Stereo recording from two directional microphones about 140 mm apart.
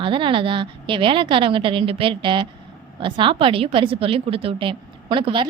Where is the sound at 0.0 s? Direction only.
35° right (ahead or behind).